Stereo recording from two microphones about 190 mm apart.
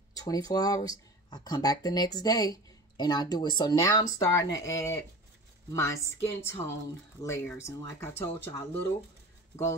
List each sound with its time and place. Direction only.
0.1 s speech: 20° left (ahead or behind)